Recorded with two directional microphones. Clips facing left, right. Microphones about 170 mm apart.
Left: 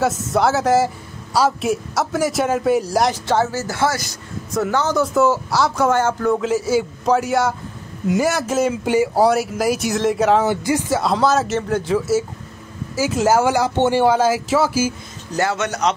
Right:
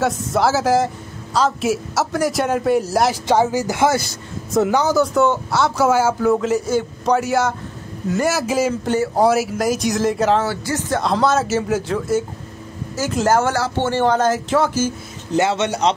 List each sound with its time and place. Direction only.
0.0 s a man's voice: centre (ahead or behind)
3.3 s speech: 15° right (ahead or behind)
4.9 s speech: centre (ahead or behind)
8.8 s speech: 10° left (ahead or behind)
9.2 s speech: centre (ahead or behind)
10.4 s speech: 15° left (ahead or behind)
15.3 s speech: 25° right (ahead or behind)